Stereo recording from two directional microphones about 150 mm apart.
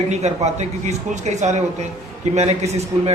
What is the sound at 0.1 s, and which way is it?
Speech, 50° right (ahead or behind).